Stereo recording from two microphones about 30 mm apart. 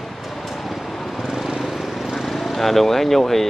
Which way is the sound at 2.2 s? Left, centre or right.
Centre.